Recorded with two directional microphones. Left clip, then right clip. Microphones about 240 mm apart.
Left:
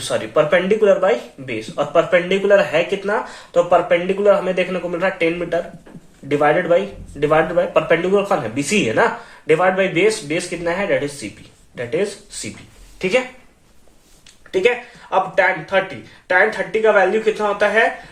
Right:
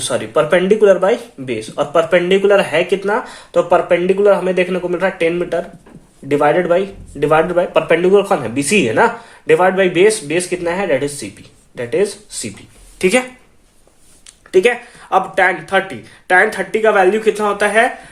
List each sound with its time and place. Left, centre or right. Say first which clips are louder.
0.0 s speech: right 2 dB; right
15.1 s speech: right 3 dB; right